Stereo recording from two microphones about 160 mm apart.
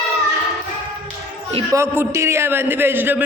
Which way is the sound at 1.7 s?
15° right (ahead or behind).